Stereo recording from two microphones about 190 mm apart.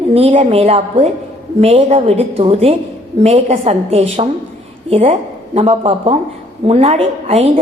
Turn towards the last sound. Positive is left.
turn(degrees=-30)  # may be behind; listen again after turning